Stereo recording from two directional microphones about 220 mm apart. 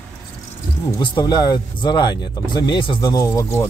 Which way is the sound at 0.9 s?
20° left (ahead or behind).